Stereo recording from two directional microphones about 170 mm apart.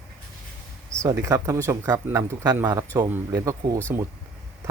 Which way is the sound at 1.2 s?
15° right (ahead or behind).